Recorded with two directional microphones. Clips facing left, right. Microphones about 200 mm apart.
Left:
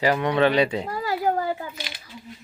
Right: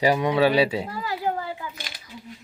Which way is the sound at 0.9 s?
40° left (ahead or behind).